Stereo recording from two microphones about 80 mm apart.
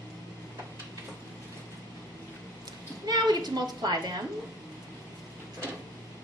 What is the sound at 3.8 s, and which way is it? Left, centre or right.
Speech, right.